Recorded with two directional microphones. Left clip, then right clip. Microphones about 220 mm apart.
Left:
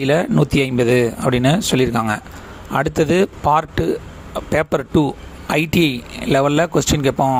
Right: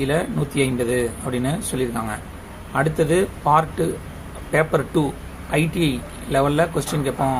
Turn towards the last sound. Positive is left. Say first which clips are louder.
# left 6 dB
turn(degrees=40)  # may be behind; listen again after turning